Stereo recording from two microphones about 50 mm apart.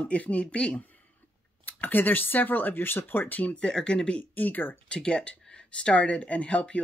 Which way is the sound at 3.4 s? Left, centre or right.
Left.